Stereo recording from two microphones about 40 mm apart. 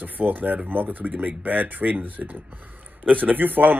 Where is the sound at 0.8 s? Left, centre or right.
Right.